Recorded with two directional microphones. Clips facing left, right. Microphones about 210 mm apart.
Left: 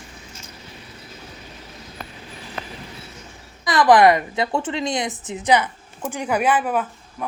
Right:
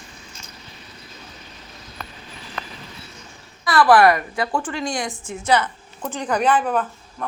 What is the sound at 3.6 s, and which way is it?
A woman's voice, 20° left (ahead or behind).